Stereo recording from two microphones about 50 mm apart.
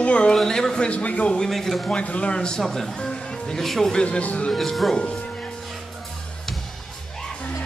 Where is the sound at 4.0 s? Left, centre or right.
Left.